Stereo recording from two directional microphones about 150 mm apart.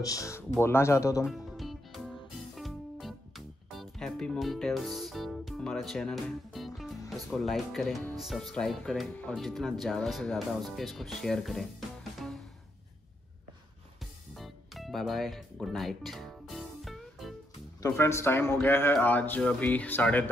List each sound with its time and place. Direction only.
0.0 s speech: 20° left (ahead or behind)
1.2 s music: centre (ahead or behind)
7.1 s speech: centre (ahead or behind)
14.3 s music: centre (ahead or behind)
17.8 s speech: 15° left (ahead or behind)